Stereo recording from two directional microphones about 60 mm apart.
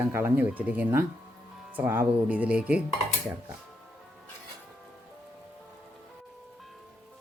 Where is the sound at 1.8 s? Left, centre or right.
Right.